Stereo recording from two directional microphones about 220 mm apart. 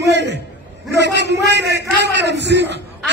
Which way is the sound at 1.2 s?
50° right (ahead or behind).